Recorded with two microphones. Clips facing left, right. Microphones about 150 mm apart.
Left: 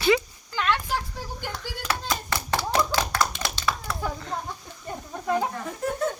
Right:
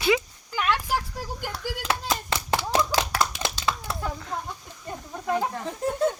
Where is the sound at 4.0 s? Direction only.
Centre (ahead or behind).